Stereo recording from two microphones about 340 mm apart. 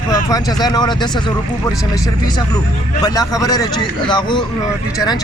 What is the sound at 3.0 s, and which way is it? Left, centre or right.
Speech, centre.